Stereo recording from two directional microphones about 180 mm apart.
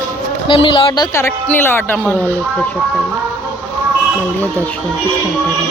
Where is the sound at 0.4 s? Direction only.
30° left (ahead or behind).